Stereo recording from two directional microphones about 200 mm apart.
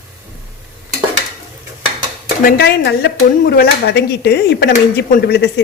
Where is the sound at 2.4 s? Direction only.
55° left (ahead or behind).